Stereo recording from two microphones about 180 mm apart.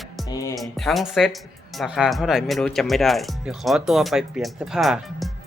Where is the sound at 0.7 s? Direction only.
Centre (ahead or behind).